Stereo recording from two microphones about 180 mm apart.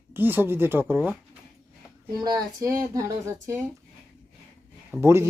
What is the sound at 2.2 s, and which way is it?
Speech, 20° right (ahead or behind).